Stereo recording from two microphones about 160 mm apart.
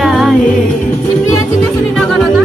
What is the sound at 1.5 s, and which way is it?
Speech, 5° left (ahead or behind).